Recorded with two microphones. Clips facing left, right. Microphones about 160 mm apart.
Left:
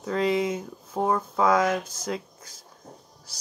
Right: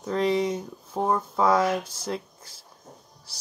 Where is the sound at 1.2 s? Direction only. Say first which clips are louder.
Right 1 dB; 10° right (ahead or behind).